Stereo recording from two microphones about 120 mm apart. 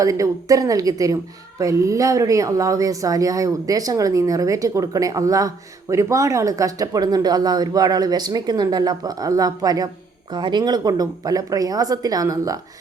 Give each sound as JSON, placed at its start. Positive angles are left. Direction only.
{"t": 0.0, "sound": "a woman's voice", "side_deg": -30}